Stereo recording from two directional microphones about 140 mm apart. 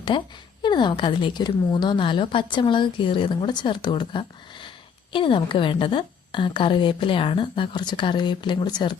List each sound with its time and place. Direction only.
0.1 s a woman's voice: 35° left (ahead or behind)